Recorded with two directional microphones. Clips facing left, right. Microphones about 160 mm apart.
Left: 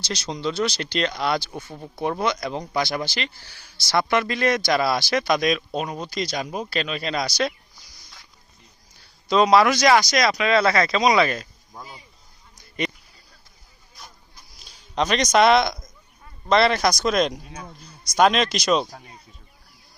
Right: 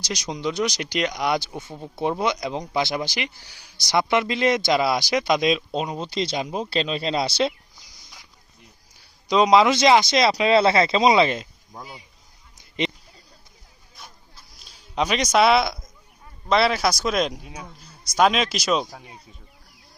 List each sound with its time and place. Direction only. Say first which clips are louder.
0.0 s speech: even; 15° right (ahead or behind)
9.0 s speech: even; 15° right (ahead or behind)
11.7 s speech: right 1 dB; 10° right (ahead or behind)
12.5 s a sound: right 1 dB; 20° right (ahead or behind)
14.0 s a sound: even; centre (ahead or behind)
14.5 s speech: left 1 dB; 5° right (ahead or behind)